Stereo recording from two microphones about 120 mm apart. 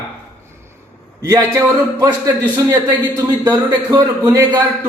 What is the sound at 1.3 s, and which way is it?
A man's voice, 30° right (ahead or behind).